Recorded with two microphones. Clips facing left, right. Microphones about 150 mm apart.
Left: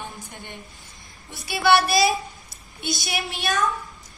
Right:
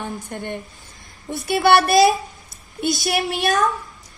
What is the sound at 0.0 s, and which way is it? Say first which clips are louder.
A woman's voice: right 9 dB; 50° right (ahead or behind).